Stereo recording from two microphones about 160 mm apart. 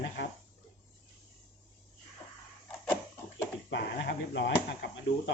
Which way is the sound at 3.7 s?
90° left.